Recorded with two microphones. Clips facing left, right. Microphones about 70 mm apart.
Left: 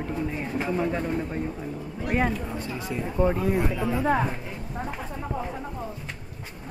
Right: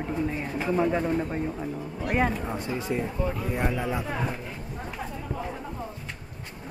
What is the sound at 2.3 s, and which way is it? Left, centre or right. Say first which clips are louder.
Speech: right 1 dB; right.